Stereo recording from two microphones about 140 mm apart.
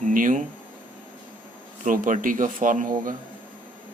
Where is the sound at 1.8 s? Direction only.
65° right (ahead or behind).